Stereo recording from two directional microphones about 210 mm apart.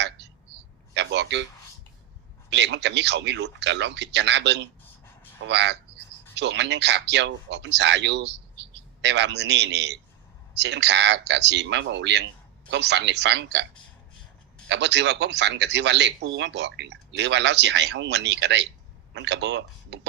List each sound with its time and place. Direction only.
0.9 s a sound: 55° right (ahead or behind)
2.5 s speech: 55° right (ahead or behind)
14.7 s speech: 55° right (ahead or behind)